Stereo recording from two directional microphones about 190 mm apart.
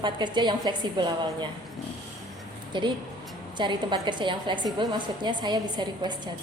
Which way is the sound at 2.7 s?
25° right (ahead or behind).